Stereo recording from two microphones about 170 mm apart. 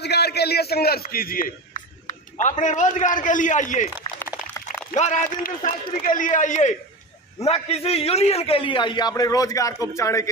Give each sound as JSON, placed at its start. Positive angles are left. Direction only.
{"t": 0.0, "sound": "a sound", "side_deg": 75}
{"t": 2.6, "sound": "a man's voice", "side_deg": 45}
{"t": 4.9, "sound": "a man's voice", "side_deg": 45}